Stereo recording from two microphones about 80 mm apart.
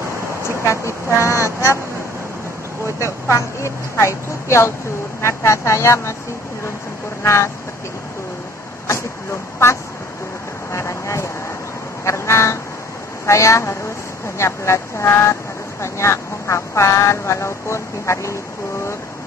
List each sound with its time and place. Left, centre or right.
0.7 s vehicle: left
3.0 s speech: left
8.8 s vehicle: left
12.0 s a sound: left
13.2 s a woman's voice: left